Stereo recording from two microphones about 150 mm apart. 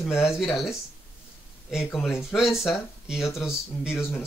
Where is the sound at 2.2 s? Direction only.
Centre (ahead or behind).